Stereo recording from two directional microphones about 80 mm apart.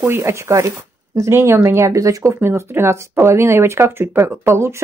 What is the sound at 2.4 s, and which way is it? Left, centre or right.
A woman's voice, right.